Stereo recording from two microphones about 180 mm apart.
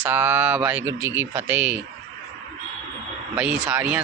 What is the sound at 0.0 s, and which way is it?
Speech, 10° right (ahead or behind).